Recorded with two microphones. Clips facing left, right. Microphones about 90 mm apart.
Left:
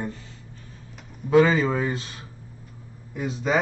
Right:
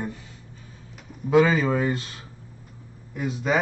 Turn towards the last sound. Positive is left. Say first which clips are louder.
# right 1 dB
turn(degrees=-5)  # may be behind; listen again after turning